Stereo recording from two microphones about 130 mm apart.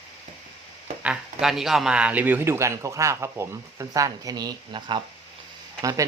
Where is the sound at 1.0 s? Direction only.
5° right (ahead or behind); by 5.0 s 35° right (ahead or behind).